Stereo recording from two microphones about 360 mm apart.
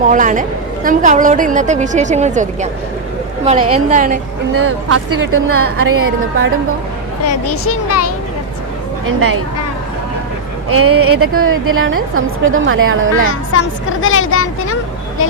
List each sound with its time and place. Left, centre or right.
0.0 s a woman's voice: right
4.5 s a woman's voice: right
7.3 s speech: left
10.7 s a woman's voice: right
13.5 s speech: left